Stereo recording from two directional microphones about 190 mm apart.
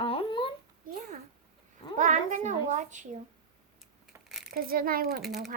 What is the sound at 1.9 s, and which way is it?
A child's voice, 40° right (ahead or behind).